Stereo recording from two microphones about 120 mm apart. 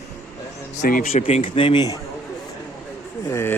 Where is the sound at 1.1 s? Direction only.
50° left (ahead or behind).